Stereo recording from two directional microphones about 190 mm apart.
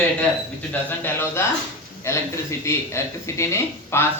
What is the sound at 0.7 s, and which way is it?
Speech, 10° left (ahead or behind).